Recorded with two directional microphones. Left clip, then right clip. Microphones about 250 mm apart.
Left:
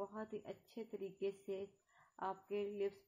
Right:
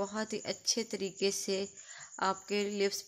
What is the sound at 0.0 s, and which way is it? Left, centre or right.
A woman's voice, right.